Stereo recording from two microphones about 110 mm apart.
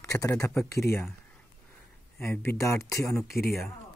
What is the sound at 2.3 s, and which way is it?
Speech, 20° left (ahead or behind).